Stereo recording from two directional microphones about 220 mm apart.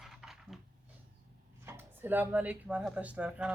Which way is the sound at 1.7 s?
10° right (ahead or behind).